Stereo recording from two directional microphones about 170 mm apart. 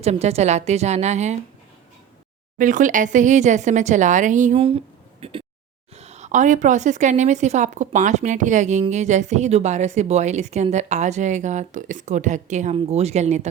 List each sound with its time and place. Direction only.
0.0 s a woman's voice: 40° right (ahead or behind)
2.6 s a woman's voice: 50° right (ahead or behind)
5.2 s a woman's voice: 35° right (ahead or behind)